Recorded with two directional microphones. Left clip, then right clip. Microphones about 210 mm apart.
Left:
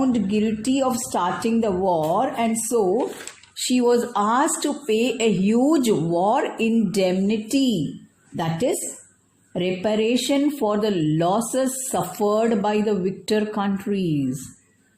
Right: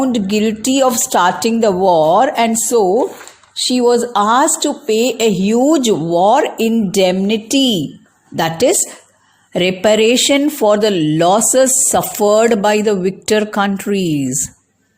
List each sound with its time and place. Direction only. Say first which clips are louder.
0.0 s speech: right 7 dB; 35° right (ahead or behind)
3.5 s a woman's voice: right 7 dB; 25° right (ahead or behind)
8.4 s a woman's voice: right 10 dB; 45° right (ahead or behind)